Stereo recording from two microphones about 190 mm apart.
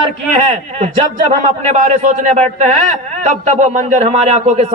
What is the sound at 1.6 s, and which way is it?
A man's voice, 35° right (ahead or behind).